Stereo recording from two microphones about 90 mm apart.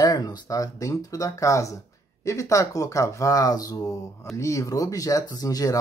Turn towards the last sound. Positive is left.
turn(degrees=45)  # may be behind; listen again after turning